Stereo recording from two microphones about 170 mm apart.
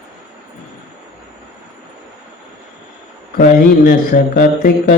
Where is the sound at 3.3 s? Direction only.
55° left (ahead or behind).